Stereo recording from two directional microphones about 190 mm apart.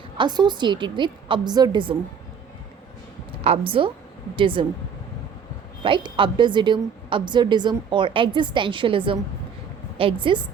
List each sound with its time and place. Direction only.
0.2 s a woman's voice: 25° right (ahead or behind)
3.4 s a woman's voice: 30° right (ahead or behind)
5.8 s a woman's voice: 25° right (ahead or behind)